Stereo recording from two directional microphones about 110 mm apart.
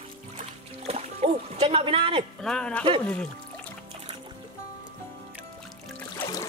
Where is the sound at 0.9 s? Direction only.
70° right (ahead or behind).